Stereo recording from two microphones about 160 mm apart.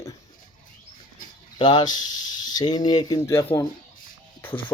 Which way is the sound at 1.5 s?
30° left (ahead or behind).